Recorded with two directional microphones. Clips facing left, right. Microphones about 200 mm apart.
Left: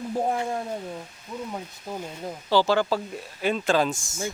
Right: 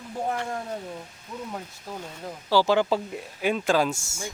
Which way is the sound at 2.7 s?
20° right (ahead or behind).